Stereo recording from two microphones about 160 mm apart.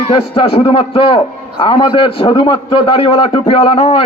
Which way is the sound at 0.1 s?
35° left (ahead or behind).